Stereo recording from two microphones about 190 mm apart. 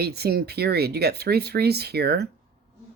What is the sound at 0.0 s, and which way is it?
Speech, 55° right (ahead or behind).